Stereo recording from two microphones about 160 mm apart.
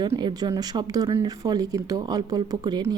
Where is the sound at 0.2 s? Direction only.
25° right (ahead or behind).